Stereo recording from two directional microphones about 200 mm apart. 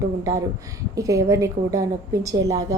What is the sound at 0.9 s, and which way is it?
A woman's voice, 15° right (ahead or behind).